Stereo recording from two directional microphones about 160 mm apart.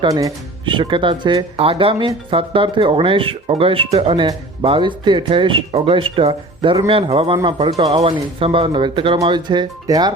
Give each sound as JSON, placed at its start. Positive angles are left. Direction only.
{"t": 0.0, "sound": "speech", "side_deg": -20}